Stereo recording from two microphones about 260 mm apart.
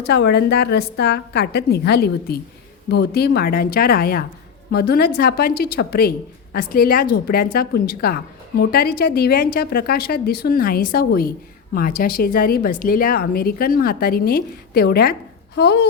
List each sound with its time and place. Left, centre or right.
0.0 s a woman's voice: left